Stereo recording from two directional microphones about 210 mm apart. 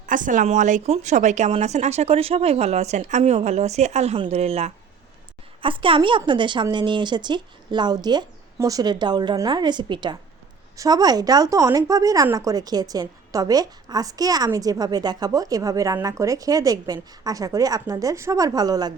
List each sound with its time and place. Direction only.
0.0 s a woman's voice: 40° right (ahead or behind); by 18.9 s 20° right (ahead or behind)